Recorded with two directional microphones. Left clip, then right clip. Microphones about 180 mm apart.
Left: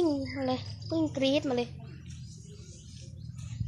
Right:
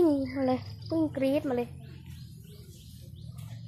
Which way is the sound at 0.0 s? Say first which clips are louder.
Right 4 dB; 35° right (ahead or behind).